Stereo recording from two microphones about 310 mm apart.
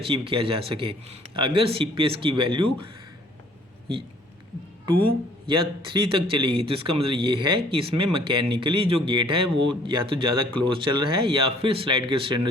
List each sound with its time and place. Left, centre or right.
0.0 s speech: centre
5.5 s speech: centre